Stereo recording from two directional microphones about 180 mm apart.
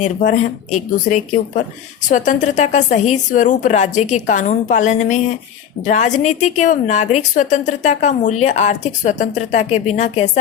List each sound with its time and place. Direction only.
0.3 s a woman's voice: 40° left (ahead or behind)